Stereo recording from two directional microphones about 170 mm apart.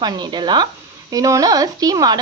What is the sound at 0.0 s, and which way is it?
Speech, 25° right (ahead or behind).